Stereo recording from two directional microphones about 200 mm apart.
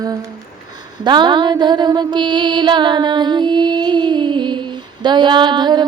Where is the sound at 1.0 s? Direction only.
20° right (ahead or behind).